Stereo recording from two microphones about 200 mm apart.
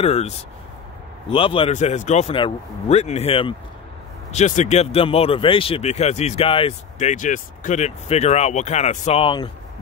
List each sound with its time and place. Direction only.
0.0 s speech: 30° left (ahead or behind)
1.3 s speech: 25° left (ahead or behind)